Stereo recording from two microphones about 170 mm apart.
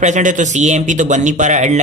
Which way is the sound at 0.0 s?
45° right (ahead or behind).